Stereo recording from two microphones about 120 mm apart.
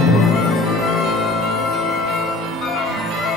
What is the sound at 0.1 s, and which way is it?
Music, centre (ahead or behind).